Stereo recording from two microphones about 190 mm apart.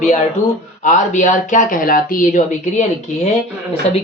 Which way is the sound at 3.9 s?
35° left (ahead or behind).